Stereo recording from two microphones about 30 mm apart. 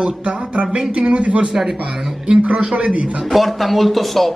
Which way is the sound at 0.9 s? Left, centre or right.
Right.